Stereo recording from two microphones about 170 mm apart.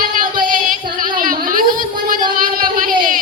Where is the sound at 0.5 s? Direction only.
55° right (ahead or behind).